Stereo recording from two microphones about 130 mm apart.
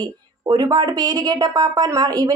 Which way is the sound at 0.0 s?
30° right (ahead or behind).